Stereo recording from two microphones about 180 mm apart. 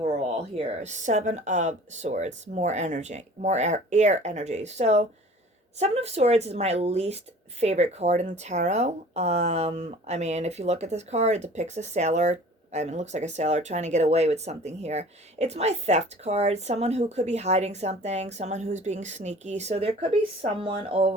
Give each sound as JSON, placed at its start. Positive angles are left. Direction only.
{"t": 0.0, "sound": "speech", "side_deg": -35}